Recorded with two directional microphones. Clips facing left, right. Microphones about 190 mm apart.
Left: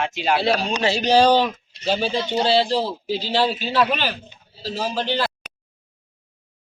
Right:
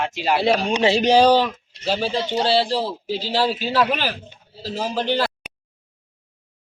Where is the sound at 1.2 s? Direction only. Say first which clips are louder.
Right 1 dB; 5° right (ahead or behind).